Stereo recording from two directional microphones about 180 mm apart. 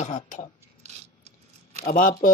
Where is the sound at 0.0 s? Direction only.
40° left (ahead or behind).